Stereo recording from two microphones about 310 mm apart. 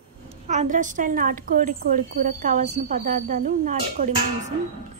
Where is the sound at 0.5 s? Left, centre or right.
Right.